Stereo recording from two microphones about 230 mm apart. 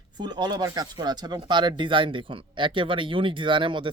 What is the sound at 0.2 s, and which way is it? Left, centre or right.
Speech, centre.